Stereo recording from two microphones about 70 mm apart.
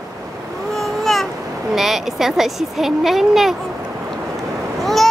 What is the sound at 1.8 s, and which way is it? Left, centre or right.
Speech, centre.